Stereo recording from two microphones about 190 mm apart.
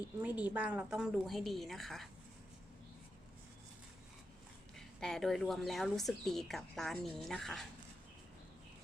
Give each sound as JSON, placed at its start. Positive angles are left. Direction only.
{"t": 0.2, "sound": "speech", "side_deg": -10}
{"t": 4.9, "sound": "speech", "side_deg": 0}